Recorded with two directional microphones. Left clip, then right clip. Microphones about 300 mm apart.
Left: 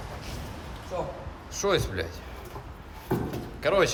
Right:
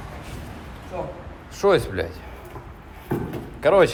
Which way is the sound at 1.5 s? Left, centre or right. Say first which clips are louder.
Right 7 dB; centre.